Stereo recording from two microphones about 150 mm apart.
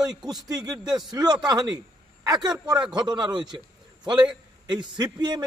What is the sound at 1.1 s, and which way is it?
A man's voice, 25° right (ahead or behind).